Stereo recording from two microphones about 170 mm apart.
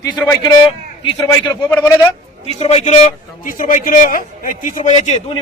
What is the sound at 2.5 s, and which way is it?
A man's voice, 35° left (ahead or behind).